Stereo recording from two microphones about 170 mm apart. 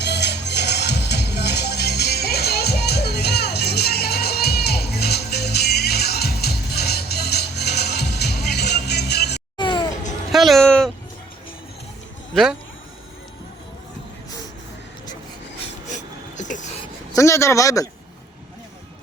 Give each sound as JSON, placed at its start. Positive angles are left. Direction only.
{"t": 0.0, "sound": "music", "side_deg": 80}
{"t": 9.6, "sound": "music", "side_deg": 25}
{"t": 10.3, "sound": "a sound", "side_deg": 0}
{"t": 12.3, "sound": "speech", "side_deg": 0}
{"t": 15.9, "sound": "a sound", "side_deg": 45}
{"t": 17.2, "sound": "speech", "side_deg": 15}